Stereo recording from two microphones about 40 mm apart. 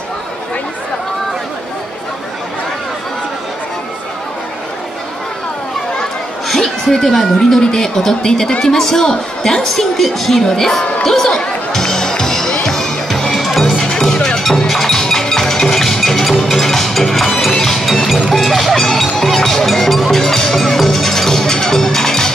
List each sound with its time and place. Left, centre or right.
6.5 s a sound: centre
7.6 s speech: centre
9.7 s speech: centre
11.0 s music: centre
13.7 s music: centre